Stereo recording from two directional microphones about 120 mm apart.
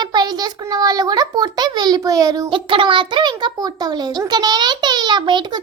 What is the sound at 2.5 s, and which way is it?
A child's voice, 45° right (ahead or behind).